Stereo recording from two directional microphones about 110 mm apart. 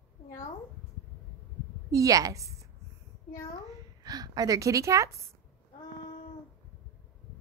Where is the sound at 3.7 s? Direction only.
35° right (ahead or behind).